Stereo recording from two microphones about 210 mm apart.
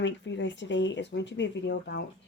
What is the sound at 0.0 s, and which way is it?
Speech, 60° left (ahead or behind).